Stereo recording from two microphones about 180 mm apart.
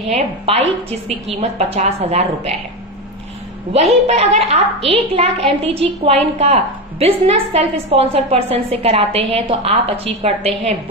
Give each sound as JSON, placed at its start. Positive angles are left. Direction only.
{"t": 0.1, "sound": "a woman's voice", "side_deg": -35}
{"t": 4.1, "sound": "a woman's voice", "side_deg": -35}